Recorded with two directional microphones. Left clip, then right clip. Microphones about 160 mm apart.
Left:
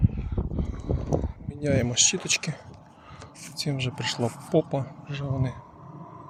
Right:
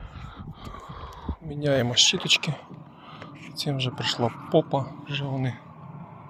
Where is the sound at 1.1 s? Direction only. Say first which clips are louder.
Left 7 dB; 10° left (ahead or behind).